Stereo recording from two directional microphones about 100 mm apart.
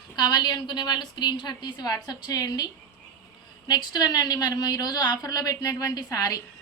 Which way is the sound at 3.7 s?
45° left (ahead or behind).